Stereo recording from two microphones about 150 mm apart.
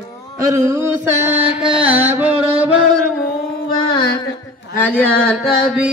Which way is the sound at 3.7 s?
30° left (ahead or behind).